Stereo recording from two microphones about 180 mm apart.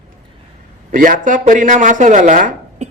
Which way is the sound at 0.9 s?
50° right (ahead or behind).